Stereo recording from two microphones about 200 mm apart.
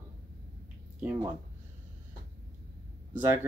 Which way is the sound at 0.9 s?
5° right (ahead or behind).